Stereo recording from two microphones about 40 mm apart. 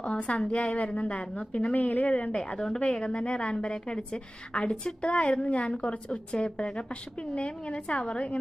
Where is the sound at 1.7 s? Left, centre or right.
Left.